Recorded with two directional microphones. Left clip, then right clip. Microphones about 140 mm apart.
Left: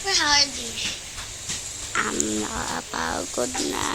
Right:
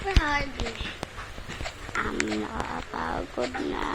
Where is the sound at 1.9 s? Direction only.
20° left (ahead or behind).